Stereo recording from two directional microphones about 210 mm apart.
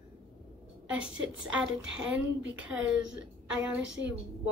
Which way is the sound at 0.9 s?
65° right (ahead or behind).